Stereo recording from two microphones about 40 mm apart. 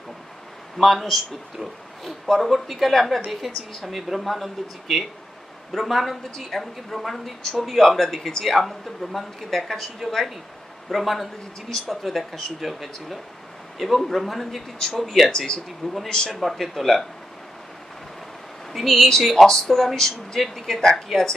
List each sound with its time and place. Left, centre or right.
0.7 s speech: centre
10.9 s speech: centre
14.8 s speech: centre
16.3 s speech: centre
18.7 s speech: centre
19.2 s speech: centre